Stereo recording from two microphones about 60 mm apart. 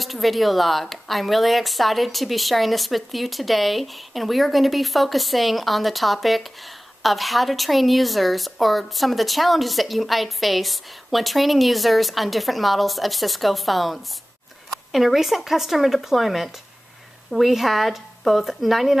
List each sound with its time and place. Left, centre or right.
0.0 s a woman's voice: centre